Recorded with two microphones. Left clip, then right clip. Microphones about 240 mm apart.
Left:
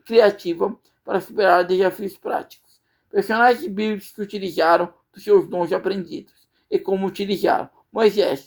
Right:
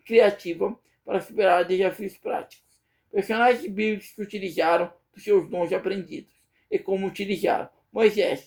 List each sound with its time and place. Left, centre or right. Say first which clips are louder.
0.0 s speech: left 3 dB; left